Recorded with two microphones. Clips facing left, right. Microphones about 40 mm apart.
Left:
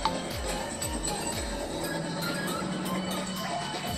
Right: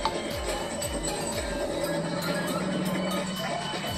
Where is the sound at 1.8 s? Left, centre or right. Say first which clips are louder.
Right 3 dB; right.